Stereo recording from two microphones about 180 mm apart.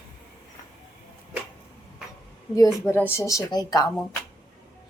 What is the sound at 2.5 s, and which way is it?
A woman's voice, 15° left (ahead or behind).